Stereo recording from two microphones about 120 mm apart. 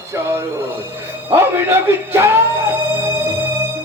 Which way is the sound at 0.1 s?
20° right (ahead or behind).